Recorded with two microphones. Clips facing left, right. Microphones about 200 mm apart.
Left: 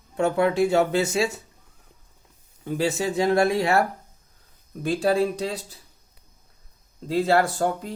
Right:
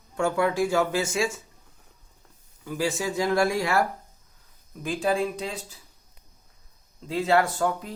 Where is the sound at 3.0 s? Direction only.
25° left (ahead or behind).